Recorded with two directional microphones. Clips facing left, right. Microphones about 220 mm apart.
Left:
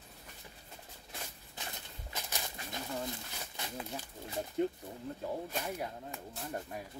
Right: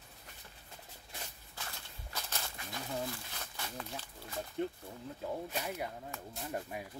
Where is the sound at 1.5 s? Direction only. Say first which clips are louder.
Left 2 dB; 20° left (ahead or behind).